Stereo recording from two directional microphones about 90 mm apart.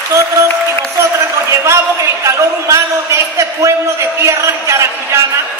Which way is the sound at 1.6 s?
30° right (ahead or behind).